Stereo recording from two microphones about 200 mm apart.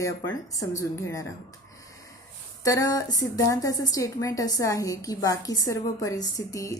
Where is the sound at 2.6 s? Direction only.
15° left (ahead or behind).